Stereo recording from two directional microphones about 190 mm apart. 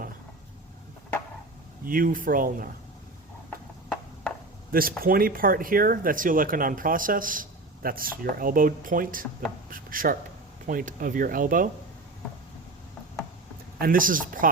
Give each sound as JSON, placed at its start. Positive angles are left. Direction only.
{"t": 1.8, "sound": "speech", "side_deg": -50}
{"t": 4.7, "sound": "speech", "side_deg": -50}
{"t": 13.7, "sound": "speech", "side_deg": -50}